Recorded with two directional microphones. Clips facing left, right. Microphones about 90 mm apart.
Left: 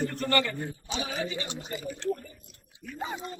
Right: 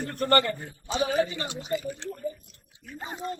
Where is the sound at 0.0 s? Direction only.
45° right (ahead or behind).